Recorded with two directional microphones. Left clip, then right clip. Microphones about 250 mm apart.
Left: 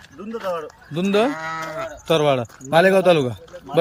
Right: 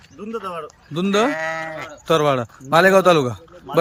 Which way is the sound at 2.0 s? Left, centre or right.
Centre.